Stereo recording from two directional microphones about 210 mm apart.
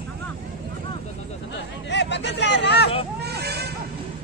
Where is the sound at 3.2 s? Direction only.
50° right (ahead or behind).